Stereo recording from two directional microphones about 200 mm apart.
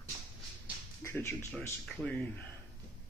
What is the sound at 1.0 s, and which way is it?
A man's voice, 10° left (ahead or behind).